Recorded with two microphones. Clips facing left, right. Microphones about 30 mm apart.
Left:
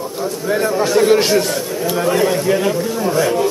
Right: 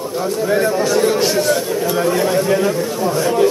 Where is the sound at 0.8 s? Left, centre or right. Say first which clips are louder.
Left 3 dB; centre.